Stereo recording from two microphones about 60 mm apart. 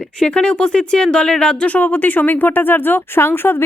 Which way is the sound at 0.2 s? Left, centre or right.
Centre.